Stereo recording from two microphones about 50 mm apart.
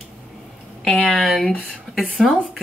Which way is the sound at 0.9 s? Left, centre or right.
Centre.